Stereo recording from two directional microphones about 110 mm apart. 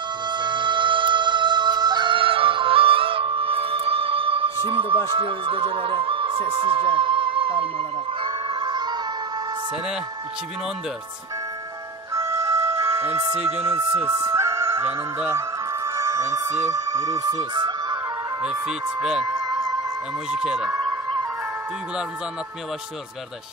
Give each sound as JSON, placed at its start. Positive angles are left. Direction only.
{"t": 0.3, "sound": "music", "side_deg": -45}
{"t": 4.6, "sound": "speech", "side_deg": -55}
{"t": 8.2, "sound": "music", "side_deg": -45}
{"t": 12.1, "sound": "music", "side_deg": -25}
{"t": 13.4, "sound": "speech", "side_deg": -70}
{"t": 13.7, "sound": "speech", "side_deg": -20}
{"t": 14.3, "sound": "music", "side_deg": -25}
{"t": 18.4, "sound": "speech", "side_deg": -10}
{"t": 19.2, "sound": "music", "side_deg": -35}
{"t": 20.2, "sound": "speech", "side_deg": -10}
{"t": 20.7, "sound": "music", "side_deg": -35}